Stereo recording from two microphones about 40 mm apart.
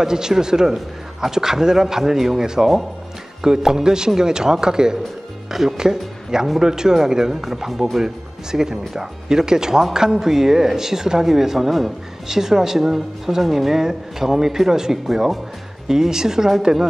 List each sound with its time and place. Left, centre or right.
0.0 s speech: centre